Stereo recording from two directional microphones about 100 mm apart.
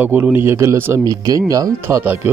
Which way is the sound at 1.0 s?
40° right (ahead or behind).